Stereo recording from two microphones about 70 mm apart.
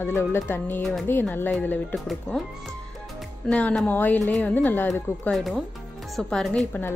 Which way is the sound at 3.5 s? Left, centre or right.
Centre.